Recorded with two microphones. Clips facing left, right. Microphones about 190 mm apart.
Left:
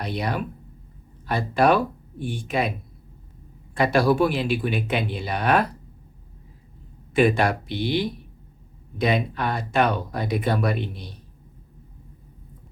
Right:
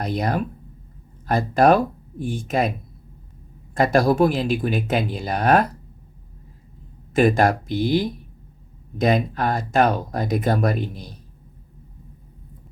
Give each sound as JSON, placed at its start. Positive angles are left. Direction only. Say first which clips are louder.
{"t": 0.0, "sound": "speech", "louder": "right 4 dB", "side_deg": -45}
{"t": 3.8, "sound": "speech", "louder": "right 2 dB", "side_deg": -45}
{"t": 7.1, "sound": "speech", "louder": "right 2 dB", "side_deg": -40}